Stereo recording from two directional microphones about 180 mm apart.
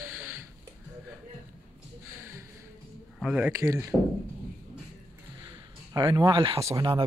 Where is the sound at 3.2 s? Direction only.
5° right (ahead or behind).